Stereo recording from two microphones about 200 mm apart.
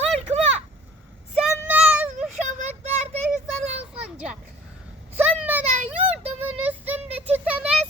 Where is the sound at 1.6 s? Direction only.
10° right (ahead or behind).